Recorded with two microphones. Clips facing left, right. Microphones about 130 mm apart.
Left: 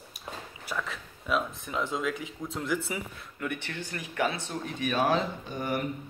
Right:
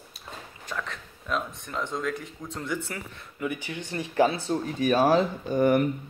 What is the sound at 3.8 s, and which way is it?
Speech, 30° right (ahead or behind).